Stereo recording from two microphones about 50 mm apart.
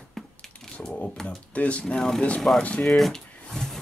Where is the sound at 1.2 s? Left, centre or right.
Left.